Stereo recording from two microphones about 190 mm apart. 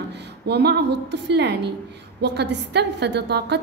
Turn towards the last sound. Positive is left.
turn(degrees=-60)  # may be behind; listen again after turning